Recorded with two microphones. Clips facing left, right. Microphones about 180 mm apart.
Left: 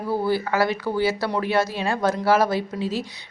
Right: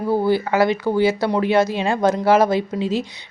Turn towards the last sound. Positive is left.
turn(degrees=-20)  # may be behind; listen again after turning